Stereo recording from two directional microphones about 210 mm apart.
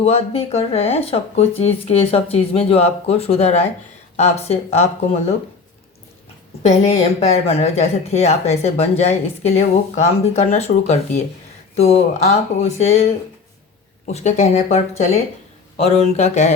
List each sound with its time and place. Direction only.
0.0 s speech: 30° left (ahead or behind)
6.6 s speech: 30° left (ahead or behind)
14.1 s speech: 35° left (ahead or behind)